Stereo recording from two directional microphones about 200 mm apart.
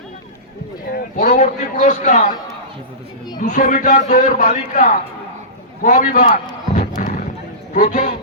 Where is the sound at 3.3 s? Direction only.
40° left (ahead or behind).